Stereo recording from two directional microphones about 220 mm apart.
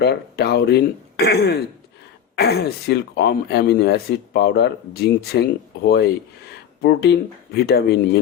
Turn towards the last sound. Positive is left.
turn(degrees=45)  # may be behind; listen again after turning